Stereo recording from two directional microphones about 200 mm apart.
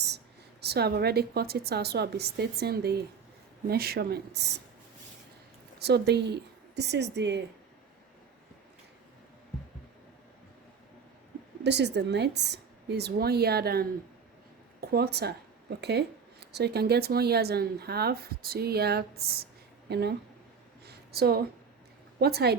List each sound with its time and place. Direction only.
0.6 s speech: 55° right (ahead or behind)
5.8 s a woman's voice: 55° right (ahead or behind)
11.6 s a woman's voice: 60° right (ahead or behind)
20.8 s a sound: 55° right (ahead or behind)
22.2 s speech: 55° right (ahead or behind)